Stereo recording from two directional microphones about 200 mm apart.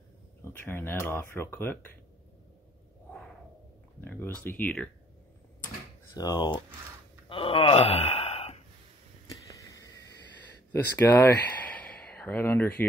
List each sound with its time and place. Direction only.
0.4 s speech: 10° left (ahead or behind)
3.1 s a sound: centre (ahead or behind)
4.0 s speech: 10° left (ahead or behind)
6.1 s speech: 20° left (ahead or behind)
7.2 s a sound: 25° left (ahead or behind)
10.7 s speech: 10° left (ahead or behind)